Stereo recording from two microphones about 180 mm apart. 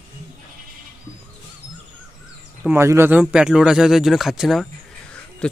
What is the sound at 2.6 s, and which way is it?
Speech, 15° right (ahead or behind).